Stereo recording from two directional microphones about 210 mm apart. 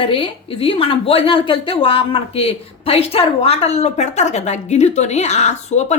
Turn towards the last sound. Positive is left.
turn(degrees=35)  # may be behind; listen again after turning